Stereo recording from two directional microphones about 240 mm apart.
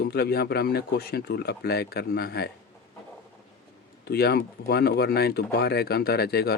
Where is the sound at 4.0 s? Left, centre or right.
Left.